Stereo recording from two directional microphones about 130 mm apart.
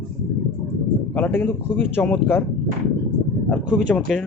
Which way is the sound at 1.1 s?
10° left (ahead or behind).